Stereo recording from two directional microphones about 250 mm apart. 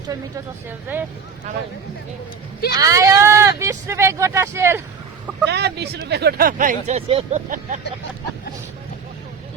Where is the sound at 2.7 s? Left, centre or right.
Centre.